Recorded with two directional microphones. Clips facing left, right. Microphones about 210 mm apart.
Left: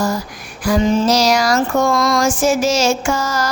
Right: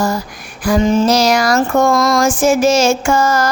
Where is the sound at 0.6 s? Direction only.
55° right (ahead or behind).